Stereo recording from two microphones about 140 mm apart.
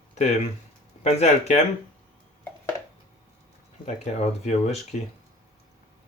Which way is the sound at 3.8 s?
55° left (ahead or behind).